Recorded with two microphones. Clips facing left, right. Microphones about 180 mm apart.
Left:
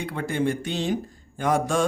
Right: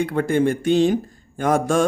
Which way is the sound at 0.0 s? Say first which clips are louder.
Right 7 dB; 50° right (ahead or behind).